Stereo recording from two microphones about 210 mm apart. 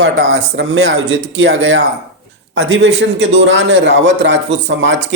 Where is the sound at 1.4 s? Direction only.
60° right (ahead or behind).